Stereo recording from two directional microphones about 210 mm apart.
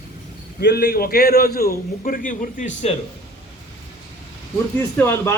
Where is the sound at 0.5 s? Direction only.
50° left (ahead or behind); by 2.9 s 35° left (ahead or behind).